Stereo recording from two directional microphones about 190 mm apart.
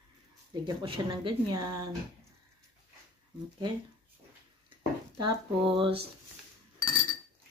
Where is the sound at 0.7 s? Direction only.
25° right (ahead or behind).